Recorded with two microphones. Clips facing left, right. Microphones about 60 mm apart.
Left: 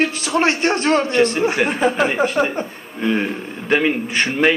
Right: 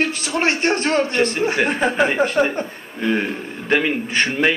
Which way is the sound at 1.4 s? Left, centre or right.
Centre.